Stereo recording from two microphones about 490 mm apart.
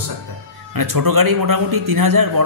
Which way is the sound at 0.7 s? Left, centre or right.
Right.